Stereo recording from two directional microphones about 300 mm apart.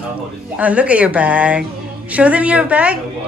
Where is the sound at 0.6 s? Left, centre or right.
Centre.